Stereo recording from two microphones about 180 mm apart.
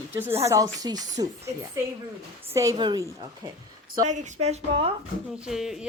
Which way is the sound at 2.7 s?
25° right (ahead or behind).